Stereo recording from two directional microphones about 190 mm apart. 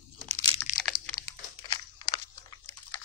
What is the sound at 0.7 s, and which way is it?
Crunch, 45° left (ahead or behind).